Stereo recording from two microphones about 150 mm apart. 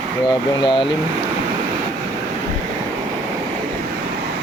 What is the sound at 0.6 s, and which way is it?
Speech, 35° left (ahead or behind).